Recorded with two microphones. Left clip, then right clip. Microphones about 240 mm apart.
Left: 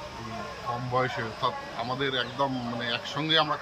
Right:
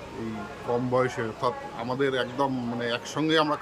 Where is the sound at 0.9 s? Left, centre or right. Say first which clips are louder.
Left 1 dB; centre.